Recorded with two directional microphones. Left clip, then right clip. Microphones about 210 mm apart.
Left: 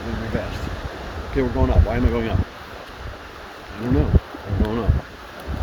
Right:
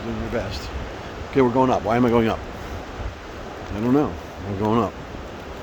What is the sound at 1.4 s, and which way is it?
Speech, 40° right (ahead or behind).